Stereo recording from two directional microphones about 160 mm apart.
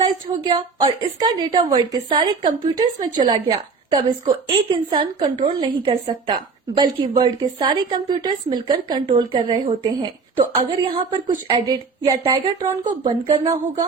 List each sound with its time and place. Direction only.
0.0 s a woman's voice: 25° right (ahead or behind)
11.5 s a woman's voice: 25° right (ahead or behind)
12.2 s a woman's voice: 35° right (ahead or behind)